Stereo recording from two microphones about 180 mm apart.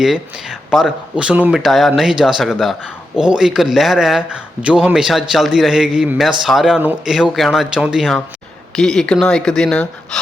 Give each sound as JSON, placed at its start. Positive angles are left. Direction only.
{"t": 0.7, "sound": "speech", "side_deg": 0}